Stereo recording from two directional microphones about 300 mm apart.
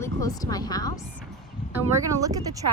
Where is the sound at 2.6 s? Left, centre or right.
Right.